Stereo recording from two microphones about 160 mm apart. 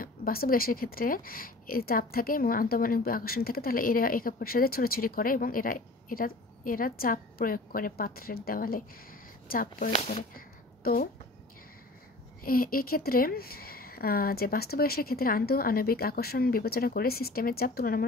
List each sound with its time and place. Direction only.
0.0 s a woman's voice: 70° left (ahead or behind)
10.3 s a sound: 65° left (ahead or behind)
12.4 s speech: 65° left (ahead or behind)